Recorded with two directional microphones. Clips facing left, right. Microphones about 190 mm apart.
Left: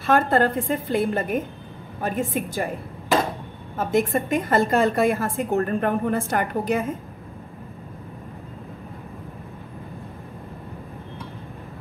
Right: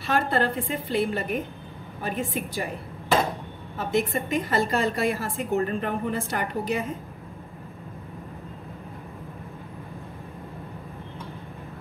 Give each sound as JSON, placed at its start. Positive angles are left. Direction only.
{"t": 0.0, "sound": "a woman's voice", "side_deg": 50}
{"t": 3.7, "sound": "a woman's voice", "side_deg": 55}